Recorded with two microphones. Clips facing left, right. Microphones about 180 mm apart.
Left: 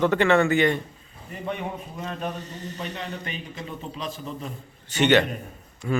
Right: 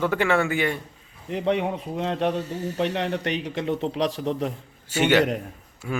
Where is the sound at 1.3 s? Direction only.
90° right.